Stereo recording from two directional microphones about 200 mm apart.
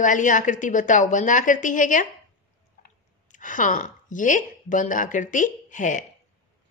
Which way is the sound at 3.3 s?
40° left (ahead or behind).